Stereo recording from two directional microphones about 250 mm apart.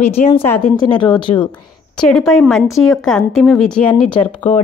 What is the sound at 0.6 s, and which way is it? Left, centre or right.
Speech, left.